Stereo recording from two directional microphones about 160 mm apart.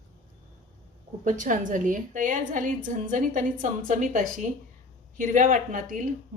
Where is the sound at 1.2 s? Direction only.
55° right (ahead or behind).